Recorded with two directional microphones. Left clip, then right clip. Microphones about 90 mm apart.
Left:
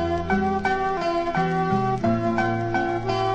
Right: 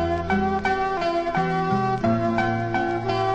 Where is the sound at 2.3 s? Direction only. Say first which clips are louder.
Even; 15° left (ahead or behind).